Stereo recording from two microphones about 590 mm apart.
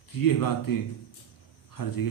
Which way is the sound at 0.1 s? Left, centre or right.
Left.